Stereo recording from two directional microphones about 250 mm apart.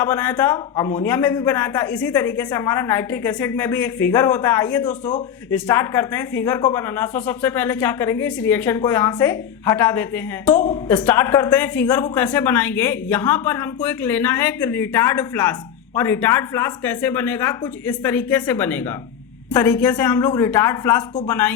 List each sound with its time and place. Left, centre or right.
0.0 s speech: centre
5.0 s speech: centre